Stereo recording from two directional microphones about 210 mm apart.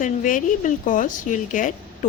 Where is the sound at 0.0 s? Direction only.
40° left (ahead or behind).